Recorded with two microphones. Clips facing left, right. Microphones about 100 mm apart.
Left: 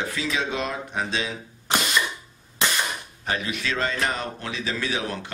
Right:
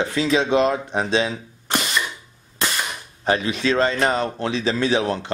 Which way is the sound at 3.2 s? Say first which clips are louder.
Right 8 dB; 30° right (ahead or behind).